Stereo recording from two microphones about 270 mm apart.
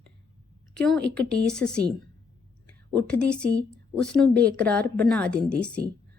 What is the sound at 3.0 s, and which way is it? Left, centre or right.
A woman's voice, centre.